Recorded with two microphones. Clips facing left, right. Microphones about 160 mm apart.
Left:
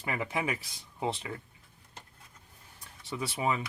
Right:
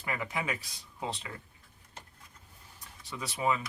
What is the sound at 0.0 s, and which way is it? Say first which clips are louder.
Speech: left 2 dB; 30° left (ahead or behind).